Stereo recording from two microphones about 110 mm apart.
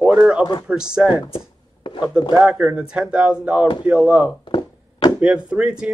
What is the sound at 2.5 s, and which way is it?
Speech, 10° right (ahead or behind).